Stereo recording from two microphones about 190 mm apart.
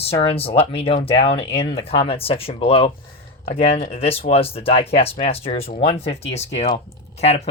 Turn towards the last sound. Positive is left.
turn(degrees=35)  # may be behind; listen again after turning